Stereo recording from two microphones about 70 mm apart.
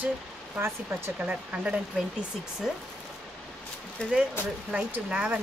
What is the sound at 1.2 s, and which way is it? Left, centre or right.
Speech, centre.